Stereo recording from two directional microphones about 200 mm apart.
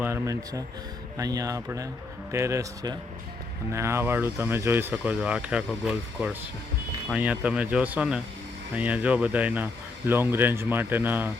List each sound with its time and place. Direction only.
0.0 s speech: 15° right (ahead or behind)